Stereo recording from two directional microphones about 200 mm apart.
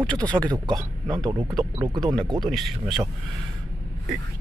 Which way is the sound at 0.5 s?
20° right (ahead or behind).